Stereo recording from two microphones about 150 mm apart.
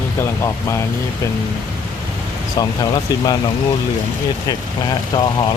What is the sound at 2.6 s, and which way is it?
Speech, 30° left (ahead or behind).